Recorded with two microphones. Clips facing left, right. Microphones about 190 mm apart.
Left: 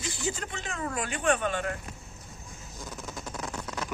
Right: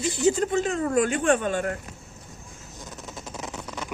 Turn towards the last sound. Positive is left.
turn(degrees=-5)  # may be behind; listen again after turning